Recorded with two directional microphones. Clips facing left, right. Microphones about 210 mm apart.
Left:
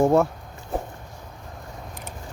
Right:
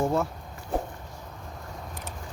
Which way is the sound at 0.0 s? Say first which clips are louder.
Left 7 dB; 55° left (ahead or behind).